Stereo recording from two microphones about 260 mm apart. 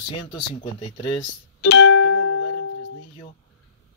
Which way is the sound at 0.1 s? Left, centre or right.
Centre.